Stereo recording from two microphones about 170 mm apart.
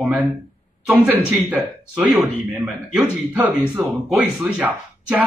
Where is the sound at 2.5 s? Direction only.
Centre (ahead or behind).